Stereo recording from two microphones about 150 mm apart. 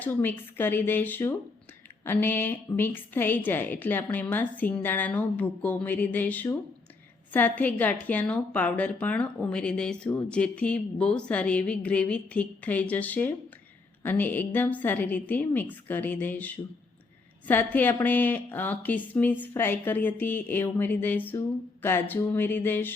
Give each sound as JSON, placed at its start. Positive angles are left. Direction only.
{"t": 0.0, "sound": "a woman's voice", "side_deg": 15}